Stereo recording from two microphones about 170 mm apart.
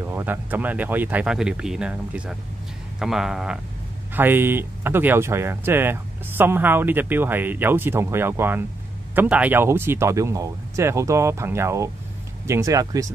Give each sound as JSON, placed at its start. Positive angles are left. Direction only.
{"t": 0.0, "sound": "speech", "side_deg": -10}